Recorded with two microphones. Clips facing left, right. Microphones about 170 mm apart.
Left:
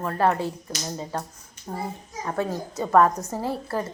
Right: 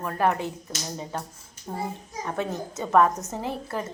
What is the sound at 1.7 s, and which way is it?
Speech, 10° left (ahead or behind).